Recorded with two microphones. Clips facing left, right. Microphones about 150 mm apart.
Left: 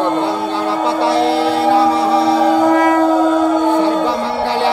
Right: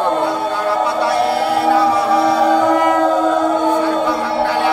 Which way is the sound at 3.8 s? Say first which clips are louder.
Left 1 dB; 25° left (ahead or behind).